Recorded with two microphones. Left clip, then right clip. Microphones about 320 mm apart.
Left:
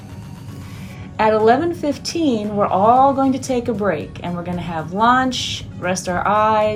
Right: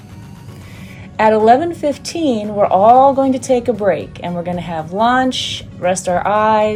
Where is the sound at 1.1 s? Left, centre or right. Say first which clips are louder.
Right 4 dB; centre.